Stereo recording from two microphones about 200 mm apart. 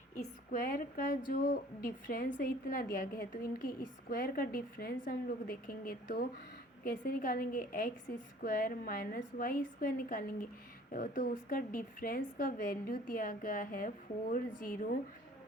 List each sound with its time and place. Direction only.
0.2 s a woman's voice: 45° left (ahead or behind)